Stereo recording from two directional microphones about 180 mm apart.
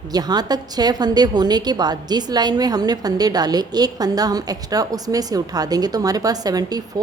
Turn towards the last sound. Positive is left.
turn(degrees=-20)  # may be behind; listen again after turning